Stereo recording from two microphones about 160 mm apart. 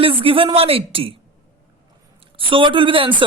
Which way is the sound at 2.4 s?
30° right (ahead or behind).